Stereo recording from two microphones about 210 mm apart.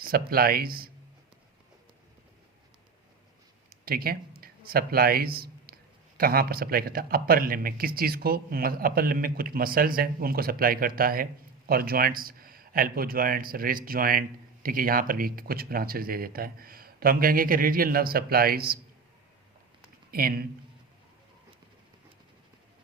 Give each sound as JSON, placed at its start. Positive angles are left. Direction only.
{"t": 0.0, "sound": "speech", "side_deg": -45}
{"t": 3.7, "sound": "speech", "side_deg": -45}
{"t": 20.1, "sound": "a man's voice", "side_deg": -45}